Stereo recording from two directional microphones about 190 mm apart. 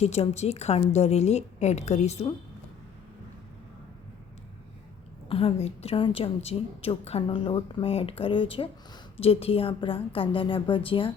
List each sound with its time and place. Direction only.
0.0 s a woman's voice: 35° left (ahead or behind)
5.3 s a woman's voice: 30° left (ahead or behind)